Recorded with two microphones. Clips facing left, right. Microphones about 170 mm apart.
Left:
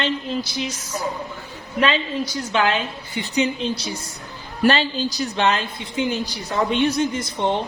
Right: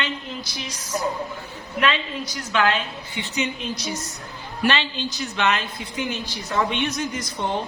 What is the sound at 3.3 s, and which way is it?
A woman's voice, 30° left (ahead or behind).